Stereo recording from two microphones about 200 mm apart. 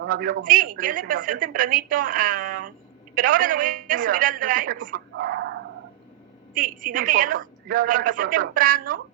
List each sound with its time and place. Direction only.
0.1 s a woman's voice: 45° right (ahead or behind)
6.5 s a woman's voice: 45° right (ahead or behind)